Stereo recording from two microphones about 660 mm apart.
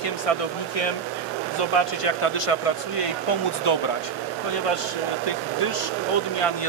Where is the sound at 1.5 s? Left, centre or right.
Left.